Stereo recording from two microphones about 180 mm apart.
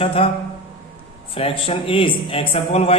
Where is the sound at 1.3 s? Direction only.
30° left (ahead or behind).